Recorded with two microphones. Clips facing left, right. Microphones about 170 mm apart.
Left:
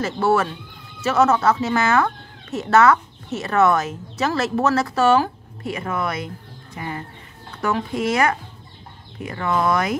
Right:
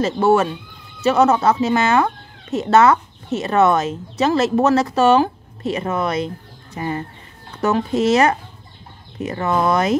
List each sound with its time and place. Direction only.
0.0 s speech: 20° right (ahead or behind)